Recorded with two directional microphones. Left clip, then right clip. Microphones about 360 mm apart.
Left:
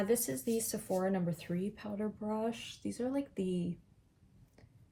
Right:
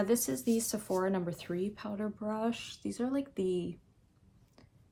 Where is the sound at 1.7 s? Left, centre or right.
Centre.